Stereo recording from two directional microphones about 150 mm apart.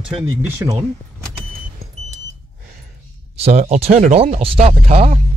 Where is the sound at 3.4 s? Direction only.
45° right (ahead or behind).